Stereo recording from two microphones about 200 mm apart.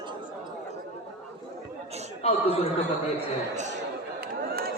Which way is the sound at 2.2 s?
30° left (ahead or behind).